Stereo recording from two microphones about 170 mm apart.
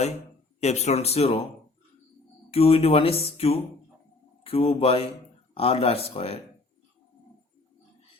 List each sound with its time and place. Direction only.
0.6 s speech: 40° left (ahead or behind)
2.5 s speech: 35° left (ahead or behind)